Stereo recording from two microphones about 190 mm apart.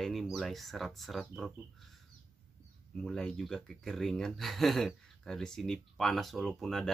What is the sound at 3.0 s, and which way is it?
Speech, 5° left (ahead or behind).